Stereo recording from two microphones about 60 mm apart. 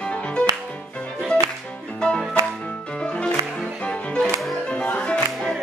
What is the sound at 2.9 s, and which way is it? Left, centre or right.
Music, centre.